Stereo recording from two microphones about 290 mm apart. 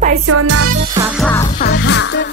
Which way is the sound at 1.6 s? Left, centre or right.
Left.